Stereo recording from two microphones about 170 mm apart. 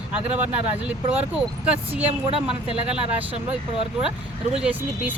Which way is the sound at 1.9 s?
35° right (ahead or behind).